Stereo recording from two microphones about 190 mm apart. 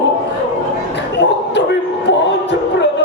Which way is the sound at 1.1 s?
65° left (ahead or behind).